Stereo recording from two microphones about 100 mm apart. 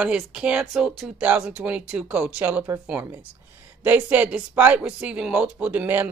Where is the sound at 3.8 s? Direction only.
20° right (ahead or behind).